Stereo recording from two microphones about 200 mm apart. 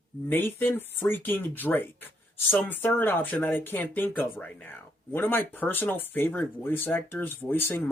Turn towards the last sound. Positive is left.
turn(degrees=10)  # may be behind; listen again after turning